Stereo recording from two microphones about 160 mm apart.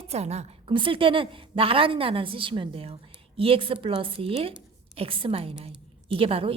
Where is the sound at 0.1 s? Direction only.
40° right (ahead or behind).